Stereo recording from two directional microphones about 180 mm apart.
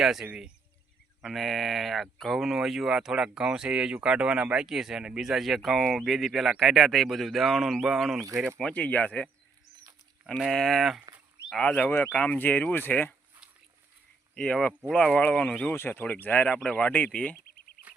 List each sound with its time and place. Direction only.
0.0 s speech: centre (ahead or behind)
14.3 s speech: 5° left (ahead or behind)